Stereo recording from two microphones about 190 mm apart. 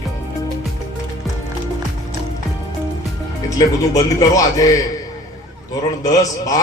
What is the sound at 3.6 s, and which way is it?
A man's voice, 15° left (ahead or behind).